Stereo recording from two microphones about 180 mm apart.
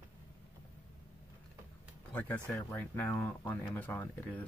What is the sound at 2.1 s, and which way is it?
Speech, 10° left (ahead or behind).